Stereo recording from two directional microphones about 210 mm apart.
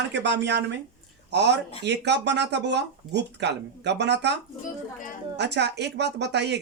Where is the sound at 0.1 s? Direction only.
55° right (ahead or behind).